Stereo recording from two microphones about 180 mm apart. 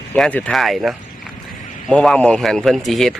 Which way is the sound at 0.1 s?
10° left (ahead or behind).